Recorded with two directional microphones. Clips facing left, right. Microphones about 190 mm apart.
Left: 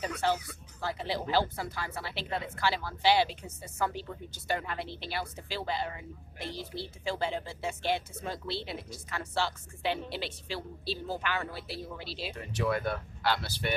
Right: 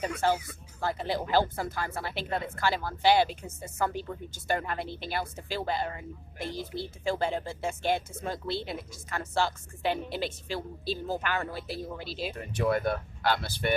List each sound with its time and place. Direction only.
0.2 s a woman's voice: 45° right (ahead or behind)